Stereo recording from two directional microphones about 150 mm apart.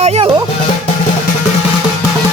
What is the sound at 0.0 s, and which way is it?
Music, 45° right (ahead or behind).